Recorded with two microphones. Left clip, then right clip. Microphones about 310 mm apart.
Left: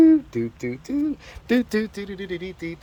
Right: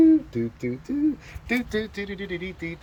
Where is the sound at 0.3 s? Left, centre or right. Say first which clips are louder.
Left 1 dB; centre.